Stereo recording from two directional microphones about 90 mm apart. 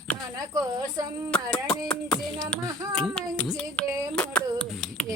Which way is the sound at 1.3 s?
10° left (ahead or behind).